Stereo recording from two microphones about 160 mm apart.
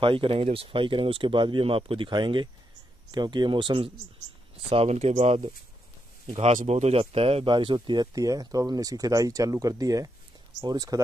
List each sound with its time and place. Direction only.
0.0 s speech: 35° right (ahead or behind)